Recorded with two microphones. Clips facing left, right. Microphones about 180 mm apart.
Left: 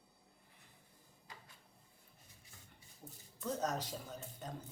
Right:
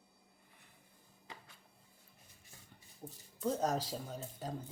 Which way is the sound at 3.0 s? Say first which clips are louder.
Right 6 dB; 30° right (ahead or behind).